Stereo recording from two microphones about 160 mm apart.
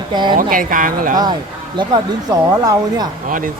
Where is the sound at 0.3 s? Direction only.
60° right (ahead or behind).